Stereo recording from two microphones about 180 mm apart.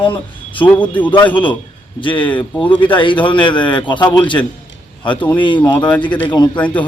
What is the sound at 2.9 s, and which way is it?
A man's voice, 25° left (ahead or behind).